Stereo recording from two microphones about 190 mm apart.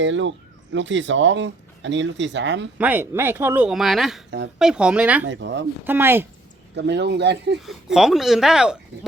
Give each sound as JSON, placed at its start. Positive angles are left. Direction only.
{"t": 0.0, "sound": "speech", "side_deg": -75}
{"t": 2.7, "sound": "speech", "side_deg": -10}
{"t": 5.3, "sound": "speech", "side_deg": -70}
{"t": 5.8, "sound": "speech", "side_deg": -10}
{"t": 6.7, "sound": "speech", "side_deg": -65}
{"t": 7.6, "sound": "speech", "side_deg": 0}